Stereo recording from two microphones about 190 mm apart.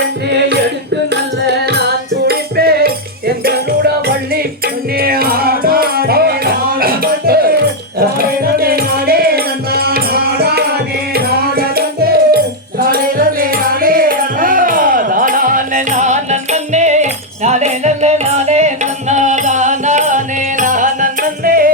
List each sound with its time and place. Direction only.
1.6 s music: 60° right (ahead or behind)